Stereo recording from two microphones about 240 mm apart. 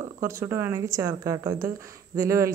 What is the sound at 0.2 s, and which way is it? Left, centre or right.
Speech, centre.